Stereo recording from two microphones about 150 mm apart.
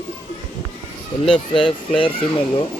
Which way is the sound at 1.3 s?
5° left (ahead or behind).